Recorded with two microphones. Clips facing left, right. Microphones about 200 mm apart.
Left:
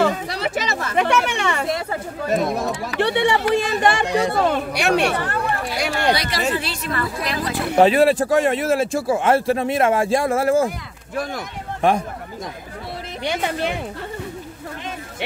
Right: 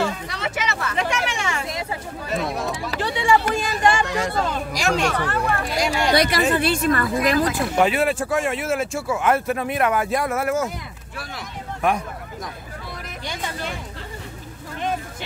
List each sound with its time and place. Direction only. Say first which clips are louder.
0.3 s speech: left 3 dB; 35° left (ahead or behind)
0.9 s speech: left 8 dB; 60° left (ahead or behind)
3.0 s speech: left 2 dB; 65° left (ahead or behind)
6.1 s a woman's voice: right 4 dB; 55° right (ahead or behind)
7.7 s speech: left 8 dB; 35° left (ahead or behind)
13.2 s speech: left 8 dB; 65° left (ahead or behind)